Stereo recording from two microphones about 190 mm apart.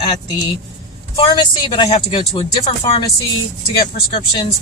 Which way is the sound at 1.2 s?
25° left (ahead or behind).